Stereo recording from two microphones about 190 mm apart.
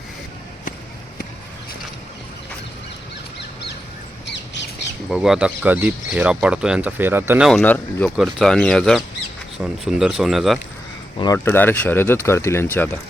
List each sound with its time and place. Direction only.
5.0 s speech: centre (ahead or behind)
7.6 s speech: 10° left (ahead or behind)
11.2 s speech: 15° left (ahead or behind)